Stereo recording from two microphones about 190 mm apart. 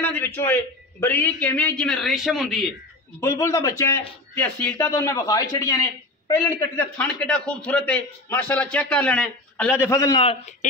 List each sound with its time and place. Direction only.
0.0 s a sound: 10° left (ahead or behind)
1.0 s a man's voice: 10° left (ahead or behind)
3.2 s a man's voice: 15° left (ahead or behind)
10.2 s a man's voice: 35° left (ahead or behind)